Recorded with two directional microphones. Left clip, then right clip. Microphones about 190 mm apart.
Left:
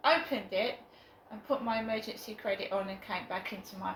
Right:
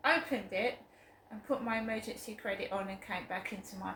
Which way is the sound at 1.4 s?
20° right (ahead or behind).